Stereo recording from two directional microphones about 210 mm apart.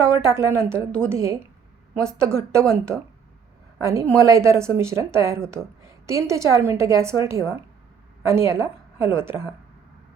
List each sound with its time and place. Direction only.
0.2 s a woman's voice: 15° right (ahead or behind)